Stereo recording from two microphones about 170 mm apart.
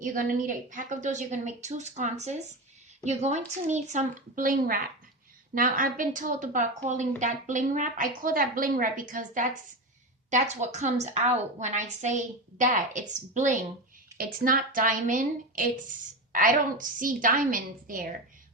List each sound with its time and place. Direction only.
0.0 s a woman's voice: 50° right (ahead or behind)